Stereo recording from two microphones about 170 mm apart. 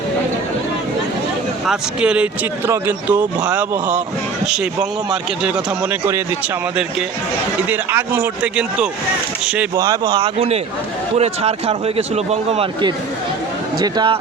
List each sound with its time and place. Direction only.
1.6 s speech: 5° right (ahead or behind)
7.7 s speech: 10° right (ahead or behind)
9.7 s speech: 20° right (ahead or behind)
10.2 s a man's voice: 40° right (ahead or behind)
13.7 s speech: 25° right (ahead or behind)